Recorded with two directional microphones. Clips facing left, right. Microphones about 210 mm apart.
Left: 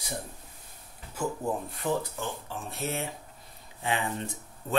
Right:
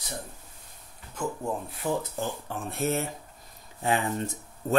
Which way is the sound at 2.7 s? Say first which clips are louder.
Right 6 dB; 50° right (ahead or behind).